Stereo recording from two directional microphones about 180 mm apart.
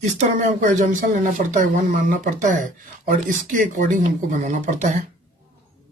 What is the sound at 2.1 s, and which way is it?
Speech, 45° right (ahead or behind).